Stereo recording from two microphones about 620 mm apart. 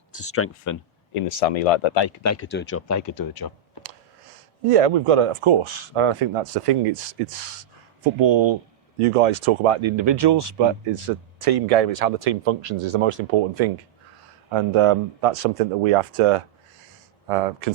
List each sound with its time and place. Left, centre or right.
0.2 s speech: left
1.1 s speech: left
2.2 s speech: left
4.7 s speech: right
8.2 s speech: right
9.0 s speech: right
14.5 s speech: right